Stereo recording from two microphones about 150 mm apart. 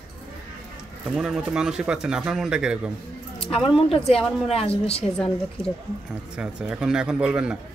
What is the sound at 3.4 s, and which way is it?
Speech, 40° left (ahead or behind).